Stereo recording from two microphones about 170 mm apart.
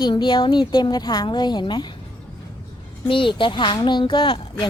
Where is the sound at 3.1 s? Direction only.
30° left (ahead or behind).